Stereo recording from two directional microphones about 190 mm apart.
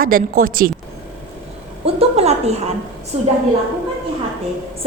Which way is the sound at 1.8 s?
30° right (ahead or behind).